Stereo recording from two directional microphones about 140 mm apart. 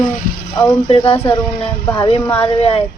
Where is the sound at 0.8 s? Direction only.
40° left (ahead or behind).